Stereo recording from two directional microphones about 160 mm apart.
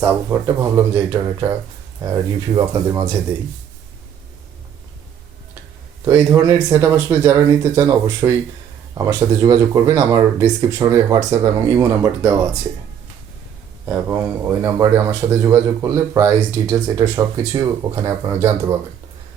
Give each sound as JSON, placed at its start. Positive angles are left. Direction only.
{"t": 0.0, "sound": "speech", "side_deg": -15}
{"t": 6.1, "sound": "speech", "side_deg": -15}
{"t": 13.8, "sound": "speech", "side_deg": -15}